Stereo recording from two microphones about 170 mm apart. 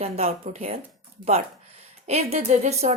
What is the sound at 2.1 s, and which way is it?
Speech, 40° right (ahead or behind).